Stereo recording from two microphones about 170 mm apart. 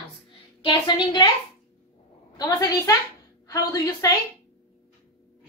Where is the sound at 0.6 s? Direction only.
25° left (ahead or behind).